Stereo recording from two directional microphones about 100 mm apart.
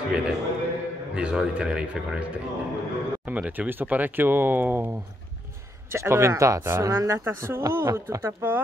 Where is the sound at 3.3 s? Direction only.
15° right (ahead or behind).